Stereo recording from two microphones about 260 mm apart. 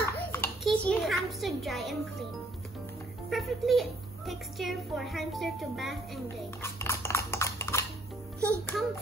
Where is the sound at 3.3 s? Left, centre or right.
Centre.